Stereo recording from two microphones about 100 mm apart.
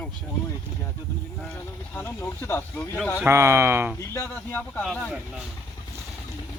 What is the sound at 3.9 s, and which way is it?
Speech, 25° left (ahead or behind).